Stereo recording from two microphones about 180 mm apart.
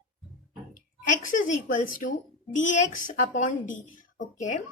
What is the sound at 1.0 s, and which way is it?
A woman's voice, 45° left (ahead or behind).